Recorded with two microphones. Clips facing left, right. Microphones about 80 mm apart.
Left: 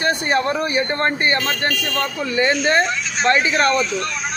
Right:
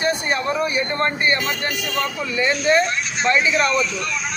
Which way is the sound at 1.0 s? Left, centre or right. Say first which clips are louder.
Even; left.